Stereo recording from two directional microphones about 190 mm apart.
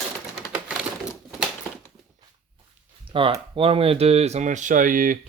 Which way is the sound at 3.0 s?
25° right (ahead or behind).